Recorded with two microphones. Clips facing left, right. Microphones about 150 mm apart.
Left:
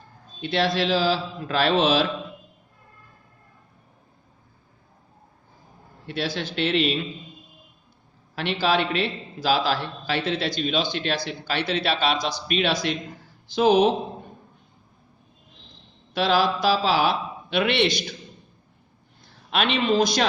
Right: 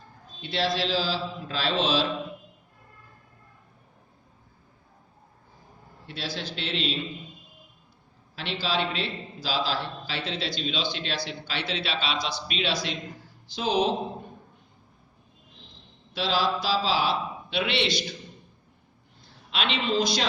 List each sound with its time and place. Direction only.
0.4 s a man's voice: 60° left (ahead or behind)
6.1 s a man's voice: 60° left (ahead or behind)
8.6 s a man's voice: 60° left (ahead or behind)
16.1 s a man's voice: 60° left (ahead or behind)
19.5 s a man's voice: 55° left (ahead or behind)